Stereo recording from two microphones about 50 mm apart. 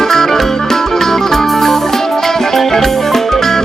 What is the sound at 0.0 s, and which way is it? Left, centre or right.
Music, centre.